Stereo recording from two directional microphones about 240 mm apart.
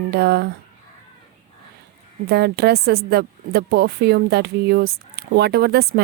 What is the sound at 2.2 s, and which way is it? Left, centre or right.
Speech, right.